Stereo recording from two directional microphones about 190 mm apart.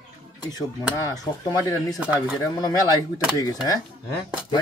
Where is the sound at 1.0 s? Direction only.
15° left (ahead or behind).